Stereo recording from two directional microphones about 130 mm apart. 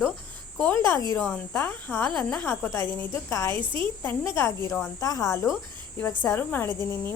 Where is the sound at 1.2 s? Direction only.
10° left (ahead or behind).